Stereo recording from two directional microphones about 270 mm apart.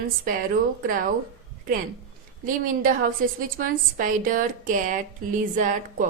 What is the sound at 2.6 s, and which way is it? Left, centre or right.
A woman's voice, right.